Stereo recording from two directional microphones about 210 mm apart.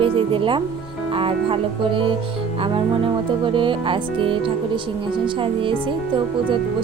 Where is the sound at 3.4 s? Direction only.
25° right (ahead or behind).